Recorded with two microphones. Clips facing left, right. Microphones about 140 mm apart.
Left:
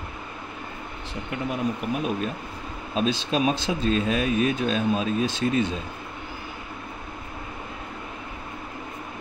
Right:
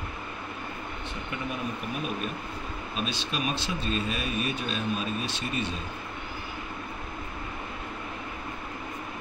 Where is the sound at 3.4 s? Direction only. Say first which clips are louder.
Left 7 dB; 90° left.